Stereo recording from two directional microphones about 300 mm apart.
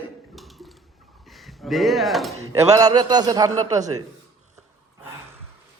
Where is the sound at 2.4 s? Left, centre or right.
Centre.